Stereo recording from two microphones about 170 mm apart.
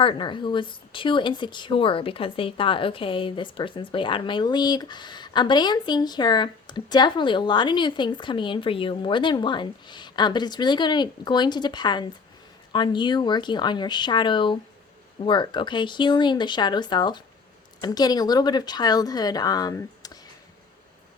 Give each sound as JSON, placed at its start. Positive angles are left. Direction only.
{"t": 0.0, "sound": "speech", "side_deg": 30}